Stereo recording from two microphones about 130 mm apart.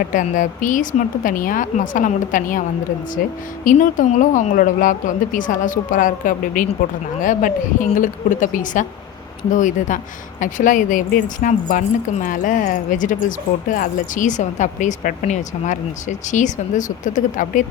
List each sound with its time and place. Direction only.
0.1 s a woman's voice: 85° left